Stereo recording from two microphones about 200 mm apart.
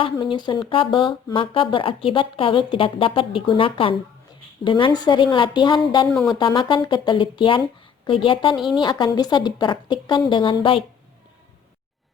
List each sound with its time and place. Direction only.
0.0 s speech: 25° left (ahead or behind)
8.5 s a woman's voice: centre (ahead or behind)
8.8 s speech: 20° left (ahead or behind)